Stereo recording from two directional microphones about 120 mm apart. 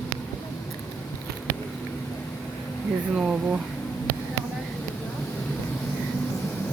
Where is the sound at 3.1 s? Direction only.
5° right (ahead or behind).